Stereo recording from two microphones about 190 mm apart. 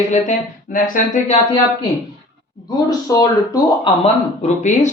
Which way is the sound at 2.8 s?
20° left (ahead or behind).